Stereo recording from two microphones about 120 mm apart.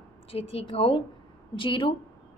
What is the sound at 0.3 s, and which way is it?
A woman's voice, 55° left (ahead or behind).